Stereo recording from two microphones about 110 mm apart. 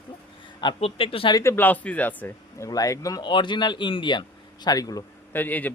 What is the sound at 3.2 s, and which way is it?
Speech, 45° left (ahead or behind).